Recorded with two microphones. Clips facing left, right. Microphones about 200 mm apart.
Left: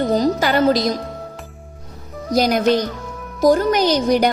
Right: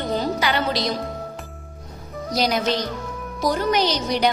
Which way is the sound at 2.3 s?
50° left (ahead or behind).